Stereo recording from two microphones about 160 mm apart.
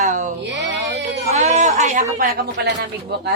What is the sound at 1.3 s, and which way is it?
Speech, 45° right (ahead or behind).